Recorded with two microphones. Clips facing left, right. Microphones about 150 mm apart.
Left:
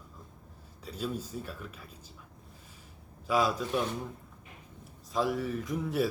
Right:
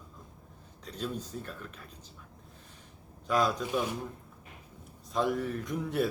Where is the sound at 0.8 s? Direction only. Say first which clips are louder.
Left 1 dB; 5° left (ahead or behind).